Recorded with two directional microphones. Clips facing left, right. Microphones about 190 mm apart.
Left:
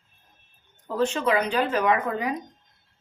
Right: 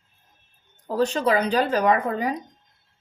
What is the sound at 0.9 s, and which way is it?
Speech, 35° right (ahead or behind).